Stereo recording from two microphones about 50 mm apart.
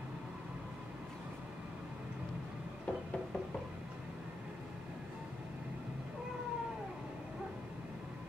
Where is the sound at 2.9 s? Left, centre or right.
Left.